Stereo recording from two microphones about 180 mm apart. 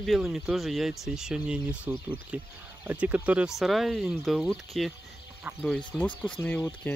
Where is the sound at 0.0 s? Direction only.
Centre (ahead or behind).